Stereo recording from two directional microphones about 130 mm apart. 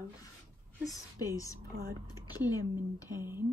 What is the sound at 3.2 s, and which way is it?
Speech, 20° right (ahead or behind).